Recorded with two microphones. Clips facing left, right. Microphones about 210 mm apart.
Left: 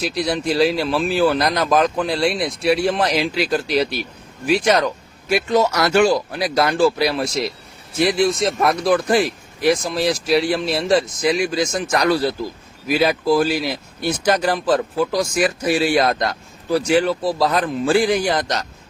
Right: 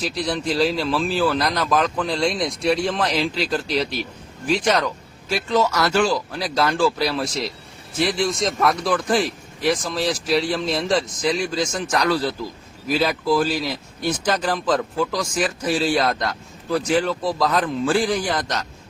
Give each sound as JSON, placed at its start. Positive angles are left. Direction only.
{"t": 0.0, "sound": "speech", "side_deg": 10}
{"t": 8.6, "sound": "speech", "side_deg": 35}
{"t": 9.0, "sound": "speech", "side_deg": 10}
{"t": 17.3, "sound": "a man's voice", "side_deg": 25}
{"t": 17.6, "sound": "speech", "side_deg": 15}